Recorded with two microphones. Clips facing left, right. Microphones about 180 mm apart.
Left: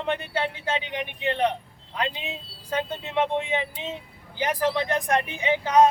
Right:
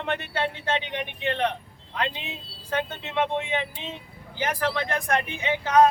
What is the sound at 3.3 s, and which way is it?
Speech, 15° left (ahead or behind).